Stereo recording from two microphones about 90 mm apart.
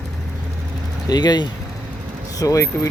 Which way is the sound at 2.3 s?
40° left (ahead or behind).